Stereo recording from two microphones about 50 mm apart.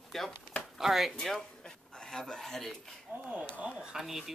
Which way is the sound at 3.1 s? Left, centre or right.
Right.